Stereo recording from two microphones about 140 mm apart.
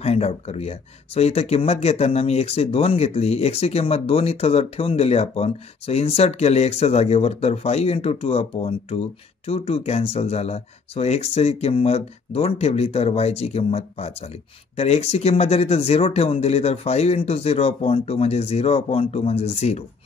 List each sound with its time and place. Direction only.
0.0 s speech: 45° left (ahead or behind)